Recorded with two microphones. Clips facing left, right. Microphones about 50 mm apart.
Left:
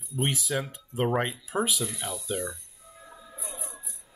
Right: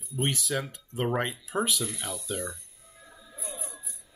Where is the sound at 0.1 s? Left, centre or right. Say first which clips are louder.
Left 1 dB; centre.